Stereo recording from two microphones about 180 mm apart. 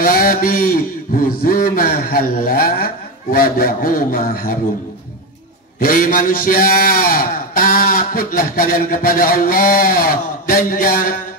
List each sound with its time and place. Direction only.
0.0 s a man's voice: 55° left (ahead or behind)
5.8 s a man's voice: 50° left (ahead or behind)